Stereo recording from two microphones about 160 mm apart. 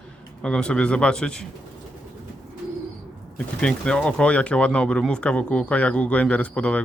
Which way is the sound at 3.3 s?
5° left (ahead or behind).